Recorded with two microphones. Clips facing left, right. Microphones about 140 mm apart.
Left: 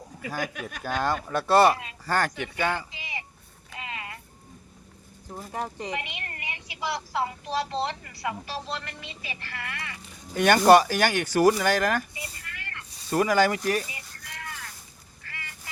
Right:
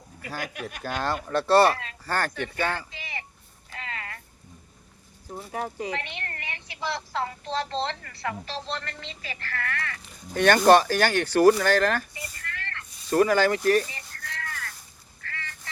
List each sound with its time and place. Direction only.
0.3 s speech: 15° left (ahead or behind)
3.8 s a sound: 15° left (ahead or behind)
5.5 s speech: 5° right (ahead or behind)
5.9 s a woman's voice: 15° left (ahead or behind)
15.3 s duck: 15° left (ahead or behind)